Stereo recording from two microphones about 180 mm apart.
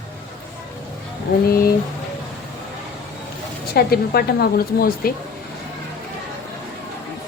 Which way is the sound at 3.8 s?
60° left (ahead or behind).